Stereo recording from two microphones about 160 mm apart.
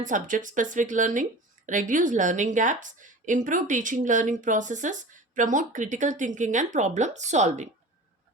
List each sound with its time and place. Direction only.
0.0 s speech: 55° right (ahead or behind)